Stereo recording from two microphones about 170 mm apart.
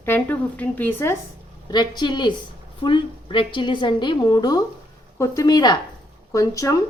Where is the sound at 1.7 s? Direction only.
25° left (ahead or behind).